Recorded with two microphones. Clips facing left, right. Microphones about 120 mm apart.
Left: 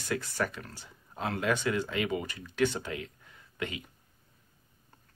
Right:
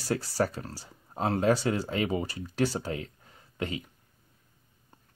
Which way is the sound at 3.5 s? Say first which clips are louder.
Right 3 dB; 35° right (ahead or behind).